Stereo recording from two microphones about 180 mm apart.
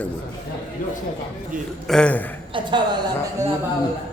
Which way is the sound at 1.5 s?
50° right (ahead or behind).